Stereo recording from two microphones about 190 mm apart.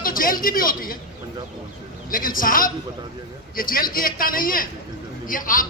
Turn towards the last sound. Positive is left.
turn(degrees=45)  # may be behind; listen again after turning